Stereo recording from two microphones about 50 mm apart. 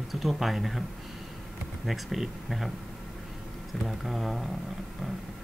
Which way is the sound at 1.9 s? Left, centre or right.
Centre.